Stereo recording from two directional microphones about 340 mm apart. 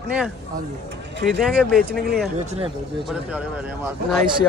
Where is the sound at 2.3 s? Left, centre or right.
Centre.